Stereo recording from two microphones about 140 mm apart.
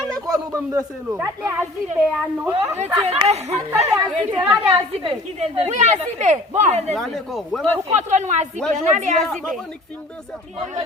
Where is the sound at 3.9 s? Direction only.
25° right (ahead or behind).